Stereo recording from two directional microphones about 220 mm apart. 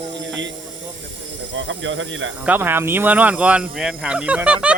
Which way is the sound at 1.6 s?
55° right (ahead or behind).